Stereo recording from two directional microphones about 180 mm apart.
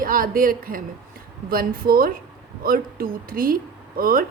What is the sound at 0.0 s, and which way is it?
A woman's voice, 50° right (ahead or behind).